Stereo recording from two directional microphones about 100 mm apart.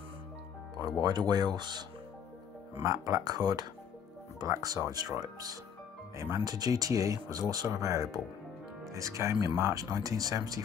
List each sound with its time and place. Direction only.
1.0 s speech: 45° right (ahead or behind)
2.8 s speech: 35° right (ahead or behind)